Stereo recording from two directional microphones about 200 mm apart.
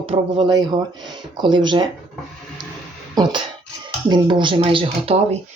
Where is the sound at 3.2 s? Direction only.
20° right (ahead or behind).